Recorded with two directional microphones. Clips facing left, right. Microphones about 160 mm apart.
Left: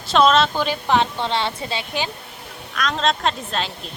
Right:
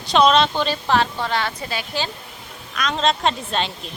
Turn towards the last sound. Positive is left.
turn(degrees=0)  # may be behind; listen again after turning